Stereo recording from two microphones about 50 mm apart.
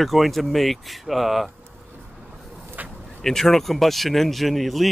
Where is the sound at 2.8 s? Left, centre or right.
Right.